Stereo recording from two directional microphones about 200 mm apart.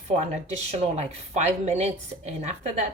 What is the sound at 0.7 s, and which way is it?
A woman's voice, 35° right (ahead or behind).